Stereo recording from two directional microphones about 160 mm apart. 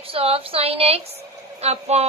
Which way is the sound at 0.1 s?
35° right (ahead or behind).